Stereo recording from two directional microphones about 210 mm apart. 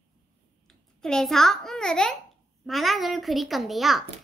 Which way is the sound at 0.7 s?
Centre (ahead or behind).